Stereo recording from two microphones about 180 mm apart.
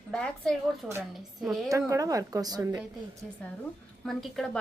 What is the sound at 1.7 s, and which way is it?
A woman's voice, 20° right (ahead or behind).